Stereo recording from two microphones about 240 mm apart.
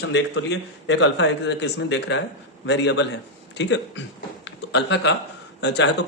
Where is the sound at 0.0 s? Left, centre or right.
Left.